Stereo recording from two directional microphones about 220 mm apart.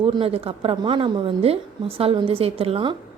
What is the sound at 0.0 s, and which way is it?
A woman's voice, 25° right (ahead or behind).